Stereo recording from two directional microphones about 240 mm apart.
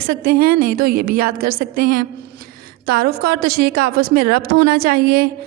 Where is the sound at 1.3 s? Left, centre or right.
Right.